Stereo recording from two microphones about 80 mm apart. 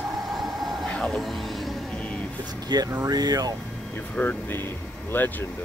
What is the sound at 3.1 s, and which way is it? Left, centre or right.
Speech, right.